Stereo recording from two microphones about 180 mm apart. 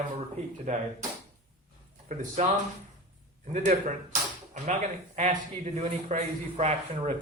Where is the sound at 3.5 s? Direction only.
45° right (ahead or behind).